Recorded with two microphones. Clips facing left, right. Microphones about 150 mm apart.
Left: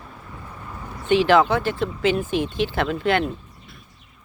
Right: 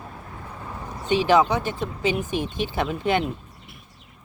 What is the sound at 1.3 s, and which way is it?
Speech, 15° right (ahead or behind).